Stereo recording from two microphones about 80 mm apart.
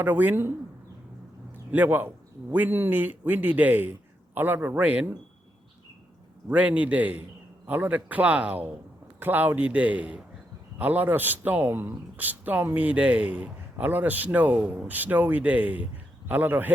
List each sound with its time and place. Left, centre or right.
0.0 s a man's voice: right
1.7 s a man's voice: right
6.5 s a man's voice: centre